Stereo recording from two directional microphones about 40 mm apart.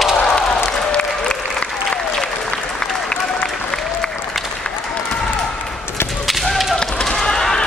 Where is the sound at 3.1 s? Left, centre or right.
Centre.